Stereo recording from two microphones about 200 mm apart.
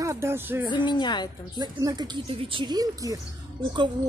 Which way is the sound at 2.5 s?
20° right (ahead or behind).